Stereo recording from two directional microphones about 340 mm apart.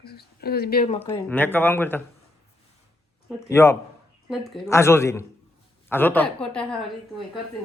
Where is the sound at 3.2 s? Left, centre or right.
Centre.